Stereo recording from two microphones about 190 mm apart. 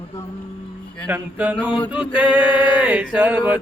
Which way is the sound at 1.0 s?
10° right (ahead or behind).